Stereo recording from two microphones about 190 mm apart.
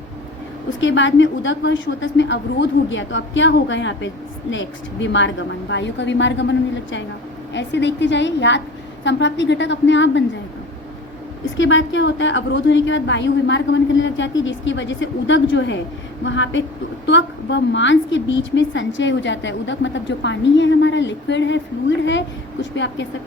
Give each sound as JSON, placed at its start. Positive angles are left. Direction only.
{"t": 0.8, "sound": "a woman's voice", "side_deg": 75}
{"t": 11.5, "sound": "a woman's voice", "side_deg": 80}